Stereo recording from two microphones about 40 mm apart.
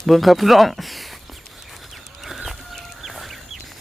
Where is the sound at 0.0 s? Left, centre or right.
Centre.